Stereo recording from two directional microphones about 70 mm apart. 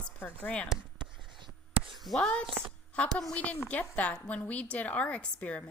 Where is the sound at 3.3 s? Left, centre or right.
Left.